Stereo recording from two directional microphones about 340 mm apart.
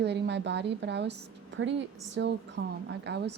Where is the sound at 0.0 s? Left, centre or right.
Right.